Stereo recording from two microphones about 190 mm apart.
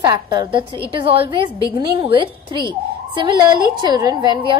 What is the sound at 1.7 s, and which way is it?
A woman's voice, 25° right (ahead or behind).